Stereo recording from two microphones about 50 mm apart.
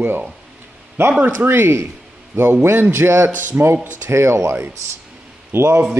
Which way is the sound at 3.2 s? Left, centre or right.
Right.